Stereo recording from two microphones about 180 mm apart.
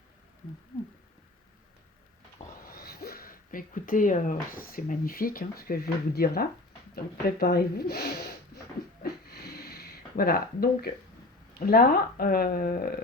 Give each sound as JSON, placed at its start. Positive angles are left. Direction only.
{"t": 2.6, "sound": "speech", "side_deg": 60}
{"t": 9.0, "sound": "a sound", "side_deg": 60}
{"t": 11.6, "sound": "speech", "side_deg": 55}